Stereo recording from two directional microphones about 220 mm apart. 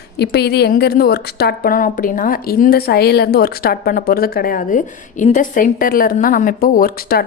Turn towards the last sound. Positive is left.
turn(degrees=45)  # may be behind; listen again after turning